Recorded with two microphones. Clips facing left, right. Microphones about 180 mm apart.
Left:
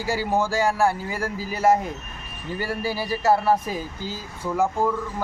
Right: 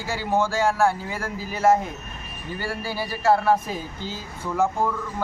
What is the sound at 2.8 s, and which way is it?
Speech, 10° left (ahead or behind).